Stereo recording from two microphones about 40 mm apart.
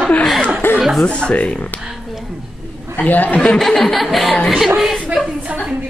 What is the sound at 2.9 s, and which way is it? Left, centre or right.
Speech, left.